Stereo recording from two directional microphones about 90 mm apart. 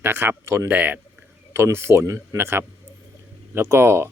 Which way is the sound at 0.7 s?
20° right (ahead or behind).